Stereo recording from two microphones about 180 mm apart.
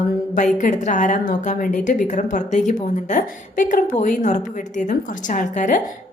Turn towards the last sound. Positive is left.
turn(degrees=45)  # may be behind; listen again after turning